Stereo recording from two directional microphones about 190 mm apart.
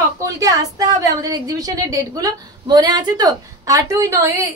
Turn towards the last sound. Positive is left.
turn(degrees=-15)  # may be behind; listen again after turning